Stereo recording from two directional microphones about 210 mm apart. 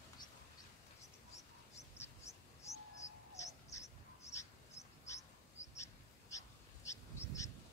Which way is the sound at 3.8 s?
15° left (ahead or behind).